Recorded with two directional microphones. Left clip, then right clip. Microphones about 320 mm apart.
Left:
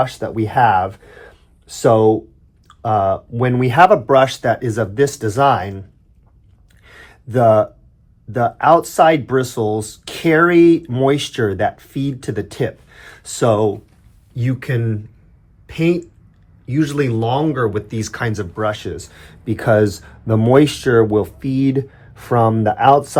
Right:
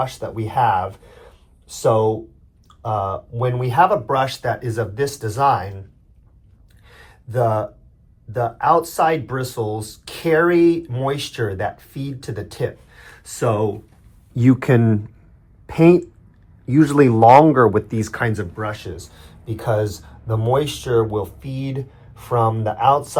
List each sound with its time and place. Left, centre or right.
0.0 s speech: left
6.8 s a sound: left
8.3 s speech: centre
14.3 s speech: centre
17.8 s speech: centre
18.5 s speech: centre